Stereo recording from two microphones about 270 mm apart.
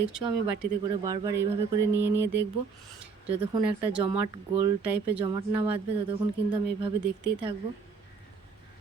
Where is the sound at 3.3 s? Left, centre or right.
Right.